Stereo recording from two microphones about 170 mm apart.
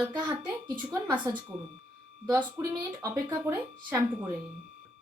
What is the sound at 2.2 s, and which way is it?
A woman's voice, 10° right (ahead or behind).